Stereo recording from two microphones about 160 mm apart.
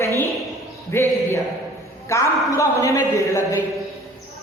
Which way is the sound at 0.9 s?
15° left (ahead or behind).